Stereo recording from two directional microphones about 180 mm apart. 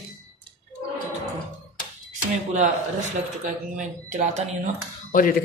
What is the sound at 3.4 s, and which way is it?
Speech, 45° right (ahead or behind).